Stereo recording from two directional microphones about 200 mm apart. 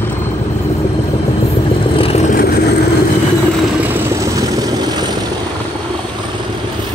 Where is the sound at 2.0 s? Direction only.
30° left (ahead or behind); by 2.6 s 50° left (ahead or behind).